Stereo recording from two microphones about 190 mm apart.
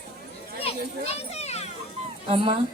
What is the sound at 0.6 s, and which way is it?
Children playing, 30° left (ahead or behind).